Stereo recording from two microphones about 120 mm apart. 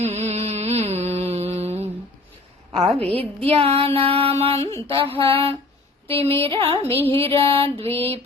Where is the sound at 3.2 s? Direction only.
55° right (ahead or behind).